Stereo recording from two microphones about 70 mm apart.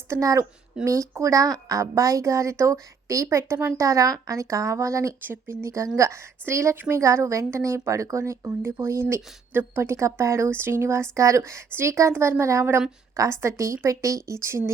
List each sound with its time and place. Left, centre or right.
0.1 s speech: right
5.2 s speech: right